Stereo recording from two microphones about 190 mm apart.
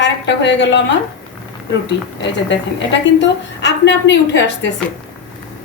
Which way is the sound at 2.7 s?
65° left (ahead or behind).